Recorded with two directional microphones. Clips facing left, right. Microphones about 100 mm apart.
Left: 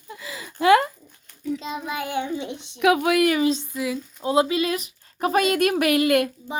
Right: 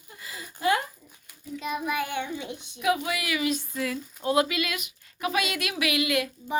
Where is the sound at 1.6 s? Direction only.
25° left (ahead or behind).